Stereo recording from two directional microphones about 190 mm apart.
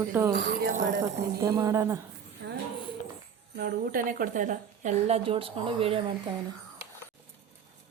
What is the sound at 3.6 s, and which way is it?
A woman's voice, 50° right (ahead or behind).